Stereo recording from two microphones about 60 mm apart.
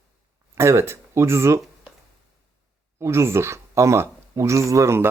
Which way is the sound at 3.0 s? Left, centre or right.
Right.